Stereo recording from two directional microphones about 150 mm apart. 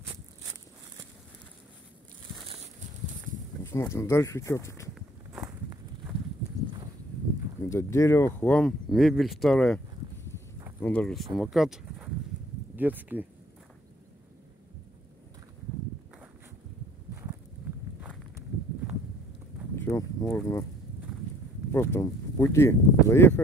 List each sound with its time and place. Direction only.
2.4 s a sound: 45° right (ahead or behind)
3.6 s speech: 20° left (ahead or behind)
5.3 s walk: 20° right (ahead or behind)
7.7 s speech: 20° left (ahead or behind)
8.4 s speech: 10° left (ahead or behind)
10.8 s speech: 10° left (ahead or behind); by 13.3 s 10° right (ahead or behind)
19.7 s a sound: 15° left (ahead or behind)
21.7 s speech: 15° left (ahead or behind)